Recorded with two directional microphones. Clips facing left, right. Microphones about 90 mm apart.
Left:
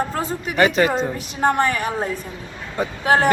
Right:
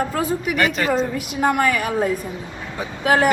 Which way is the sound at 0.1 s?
35° left (ahead or behind).